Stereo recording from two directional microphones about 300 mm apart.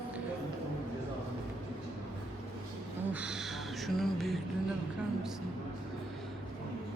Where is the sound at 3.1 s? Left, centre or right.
Centre.